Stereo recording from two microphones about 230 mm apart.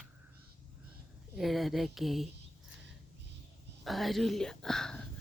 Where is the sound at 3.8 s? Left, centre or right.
Centre.